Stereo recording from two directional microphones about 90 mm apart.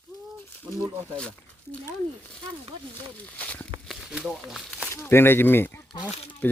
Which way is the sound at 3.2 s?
15° left (ahead or behind).